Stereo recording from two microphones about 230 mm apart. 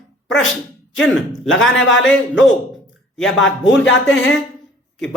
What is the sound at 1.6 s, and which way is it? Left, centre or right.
Speech, left.